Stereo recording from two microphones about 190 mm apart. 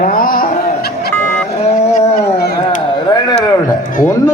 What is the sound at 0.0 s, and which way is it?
Music, 50° left (ahead or behind).